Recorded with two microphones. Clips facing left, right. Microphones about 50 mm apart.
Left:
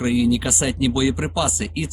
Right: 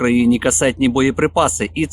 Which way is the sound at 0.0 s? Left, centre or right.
Right.